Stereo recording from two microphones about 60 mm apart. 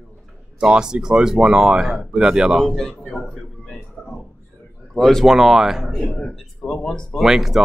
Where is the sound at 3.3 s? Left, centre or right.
Centre.